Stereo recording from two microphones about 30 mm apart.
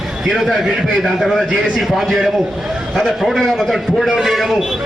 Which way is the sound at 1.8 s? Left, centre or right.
Centre.